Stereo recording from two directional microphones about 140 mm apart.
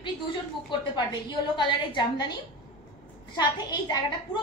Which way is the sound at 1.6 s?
35° left (ahead or behind).